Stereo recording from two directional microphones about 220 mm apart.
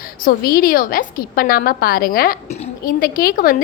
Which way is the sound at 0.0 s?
40° left (ahead or behind).